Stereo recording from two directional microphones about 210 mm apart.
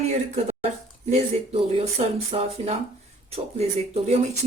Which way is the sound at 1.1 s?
30° right (ahead or behind).